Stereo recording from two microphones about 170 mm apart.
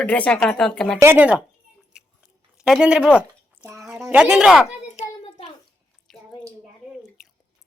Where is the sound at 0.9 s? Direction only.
15° right (ahead or behind).